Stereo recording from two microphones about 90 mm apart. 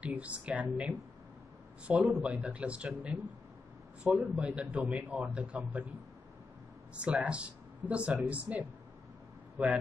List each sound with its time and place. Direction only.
0.0 s a man's voice: 15° right (ahead or behind)
4.0 s a man's voice: 15° right (ahead or behind)
7.0 s a man's voice: 10° right (ahead or behind)